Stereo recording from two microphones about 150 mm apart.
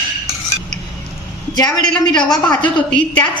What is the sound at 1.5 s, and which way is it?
Speech, 25° left (ahead or behind).